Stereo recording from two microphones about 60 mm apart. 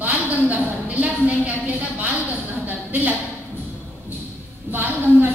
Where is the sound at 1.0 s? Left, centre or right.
Right.